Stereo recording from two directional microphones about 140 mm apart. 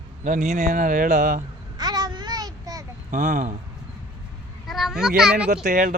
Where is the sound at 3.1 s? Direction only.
60° right (ahead or behind).